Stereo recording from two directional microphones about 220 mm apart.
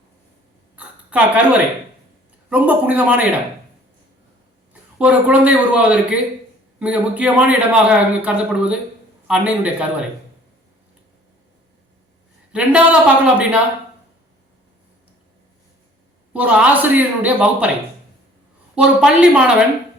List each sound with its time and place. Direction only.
0.8 s a sound: 5° right (ahead or behind)
2.5 s a man's voice: 5° right (ahead or behind)
4.7 s a man's voice: 5° right (ahead or behind)
12.5 s a man's voice: 5° right (ahead or behind)
16.3 s a man's voice: 5° right (ahead or behind)
18.7 s a man's voice: 5° right (ahead or behind)